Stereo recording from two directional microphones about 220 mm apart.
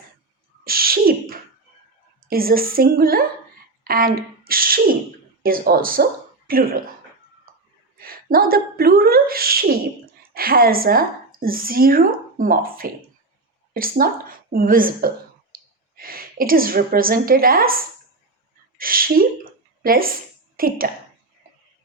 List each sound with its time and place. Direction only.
0.6 s a sound: 40° right (ahead or behind)
2.2 s a woman's voice: 40° right (ahead or behind)
7.9 s a woman's voice: 40° right (ahead or behind)